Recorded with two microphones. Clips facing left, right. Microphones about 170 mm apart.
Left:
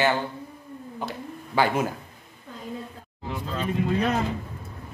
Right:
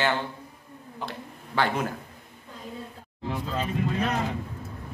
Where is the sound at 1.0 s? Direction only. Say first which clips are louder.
Left 2 dB; 5° left (ahead or behind).